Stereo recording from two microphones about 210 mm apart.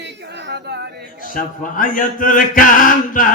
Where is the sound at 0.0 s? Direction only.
55° right (ahead or behind).